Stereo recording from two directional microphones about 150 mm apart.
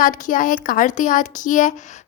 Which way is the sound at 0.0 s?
60° left (ahead or behind).